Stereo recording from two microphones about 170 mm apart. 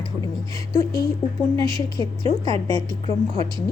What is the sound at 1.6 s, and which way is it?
A woman's voice, 25° left (ahead or behind).